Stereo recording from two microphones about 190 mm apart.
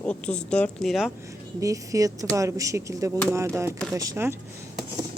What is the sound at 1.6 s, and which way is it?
Speech, 15° right (ahead or behind).